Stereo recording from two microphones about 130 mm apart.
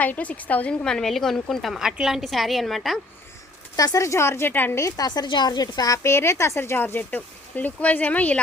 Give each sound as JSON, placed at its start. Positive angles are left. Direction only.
{"t": 0.0, "sound": "a woman's voice", "side_deg": 10}
{"t": 3.8, "sound": "a woman's voice", "side_deg": 25}